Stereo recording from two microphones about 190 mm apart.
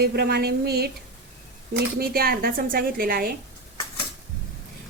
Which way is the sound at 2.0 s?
55° right (ahead or behind).